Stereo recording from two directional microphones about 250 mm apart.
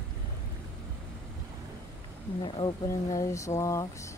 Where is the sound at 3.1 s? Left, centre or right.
Centre.